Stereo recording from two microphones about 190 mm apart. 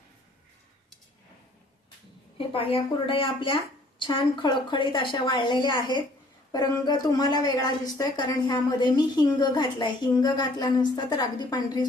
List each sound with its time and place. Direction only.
2.4 s speech: 30° left (ahead or behind)